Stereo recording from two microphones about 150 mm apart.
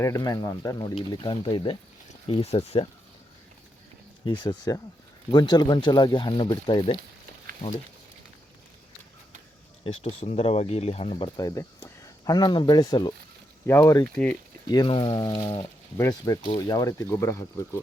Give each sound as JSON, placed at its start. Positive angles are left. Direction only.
{"t": 0.0, "sound": "speech", "side_deg": 25}
{"t": 4.3, "sound": "speech", "side_deg": 30}
{"t": 9.8, "sound": "speech", "side_deg": 45}
{"t": 11.3, "sound": "speech", "side_deg": 20}
{"t": 14.7, "sound": "speech", "side_deg": 30}